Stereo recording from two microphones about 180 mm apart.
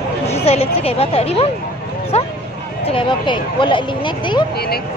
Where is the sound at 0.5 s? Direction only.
35° left (ahead or behind).